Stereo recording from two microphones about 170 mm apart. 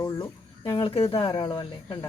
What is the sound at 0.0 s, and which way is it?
Speech, 25° left (ahead or behind).